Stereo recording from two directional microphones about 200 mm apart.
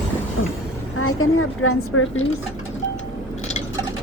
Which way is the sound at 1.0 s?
90° left.